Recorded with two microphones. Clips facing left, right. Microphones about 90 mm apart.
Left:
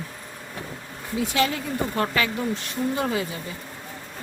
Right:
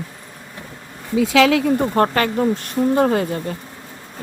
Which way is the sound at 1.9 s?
50° right (ahead or behind).